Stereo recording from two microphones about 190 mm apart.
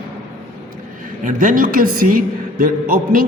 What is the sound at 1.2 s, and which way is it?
A woman's voice, 45° right (ahead or behind).